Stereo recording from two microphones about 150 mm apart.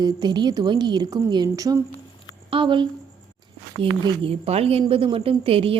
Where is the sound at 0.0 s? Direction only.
30° right (ahead or behind).